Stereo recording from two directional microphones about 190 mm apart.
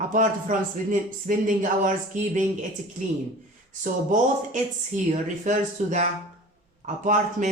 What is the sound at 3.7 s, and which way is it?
Speech, 40° right (ahead or behind).